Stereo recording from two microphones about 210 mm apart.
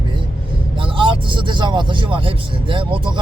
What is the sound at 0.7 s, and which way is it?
Speech, 25° right (ahead or behind).